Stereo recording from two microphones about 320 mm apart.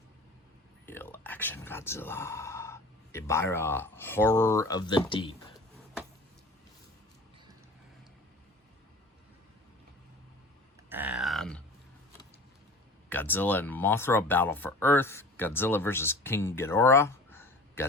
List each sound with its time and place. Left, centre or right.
0.9 s speech: centre
10.8 s a sound: centre
13.1 s speech: centre